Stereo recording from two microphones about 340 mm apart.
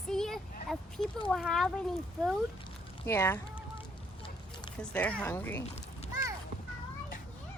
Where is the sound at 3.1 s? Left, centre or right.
Centre.